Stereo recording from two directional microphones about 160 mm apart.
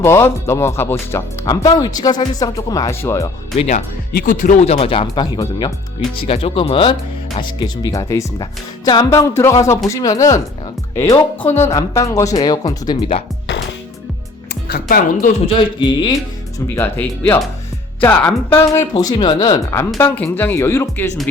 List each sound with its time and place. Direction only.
0.0 s speech: 15° left (ahead or behind)
3.6 s speech: 45° left (ahead or behind)
4.1 s speech: 60° left (ahead or behind); by 5.2 s 35° left (ahead or behind)
5.2 s speech: 25° left (ahead or behind)
6.2 s speech: 35° left (ahead or behind)
14.7 s speech: 65° left (ahead or behind)
15.8 s speech: 25° left (ahead or behind)
16.7 s speech: 15° left (ahead or behind)